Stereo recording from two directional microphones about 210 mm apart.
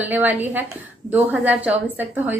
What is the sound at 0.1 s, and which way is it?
A woman's voice, 10° right (ahead or behind).